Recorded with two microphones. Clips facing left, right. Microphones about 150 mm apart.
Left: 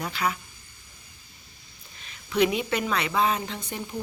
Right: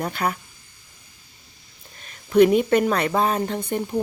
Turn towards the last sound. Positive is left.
turn(degrees=-50)  # may be behind; listen again after turning